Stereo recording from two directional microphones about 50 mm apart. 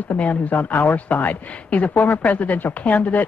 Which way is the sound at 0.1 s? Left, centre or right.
Left.